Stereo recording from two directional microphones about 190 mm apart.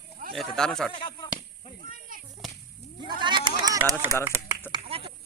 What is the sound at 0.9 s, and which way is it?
Speech, 25° left (ahead or behind).